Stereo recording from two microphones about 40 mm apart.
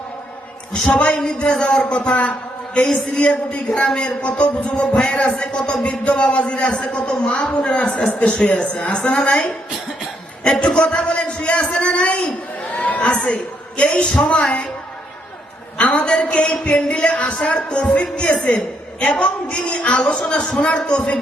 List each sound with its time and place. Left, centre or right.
0.7 s a man's voice: left
8.1 s a man's voice: left
10.6 s music: left
11.7 s a sound: left
14.3 s speech: left
15.8 s a woman's voice: left
20.1 s speech: left
20.6 s a man's voice: left